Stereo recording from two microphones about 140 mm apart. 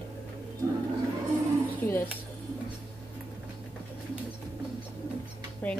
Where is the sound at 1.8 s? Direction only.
15° left (ahead or behind).